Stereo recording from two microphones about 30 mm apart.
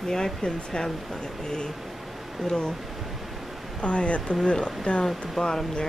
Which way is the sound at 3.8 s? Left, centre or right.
Left.